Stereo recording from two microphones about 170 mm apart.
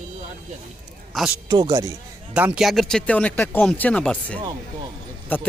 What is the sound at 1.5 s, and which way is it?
Speech, 25° right (ahead or behind).